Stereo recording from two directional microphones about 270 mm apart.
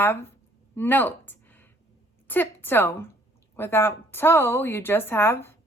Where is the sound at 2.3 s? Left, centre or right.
Centre.